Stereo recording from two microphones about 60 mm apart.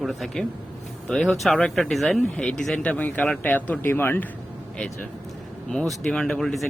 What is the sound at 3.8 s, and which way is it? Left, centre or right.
Speech, left.